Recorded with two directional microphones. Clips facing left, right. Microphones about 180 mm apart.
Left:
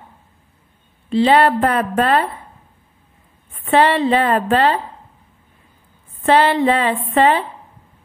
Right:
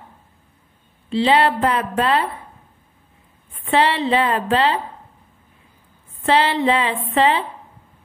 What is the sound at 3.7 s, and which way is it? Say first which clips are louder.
A woman's voice: left 3 dB; 50° left (ahead or behind).